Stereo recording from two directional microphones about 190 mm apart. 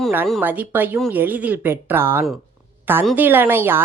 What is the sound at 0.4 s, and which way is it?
A woman's voice, 10° right (ahead or behind).